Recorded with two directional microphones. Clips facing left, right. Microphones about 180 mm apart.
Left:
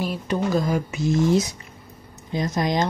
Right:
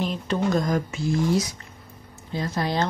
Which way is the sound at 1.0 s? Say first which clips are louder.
Left 5 dB; 20° left (ahead or behind).